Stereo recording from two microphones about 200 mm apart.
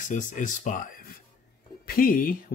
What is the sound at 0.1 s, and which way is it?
Speech, 40° left (ahead or behind).